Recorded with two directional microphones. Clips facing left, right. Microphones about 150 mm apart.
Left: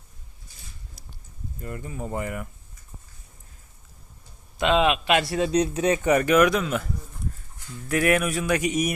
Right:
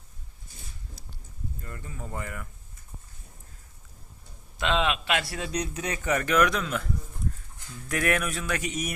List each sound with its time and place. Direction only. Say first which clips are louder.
1.6 s speech: left 11 dB; 20° left (ahead or behind)
4.5 s speech: left 6 dB; 15° left (ahead or behind)
7.9 s speech: left 5 dB; 5° left (ahead or behind)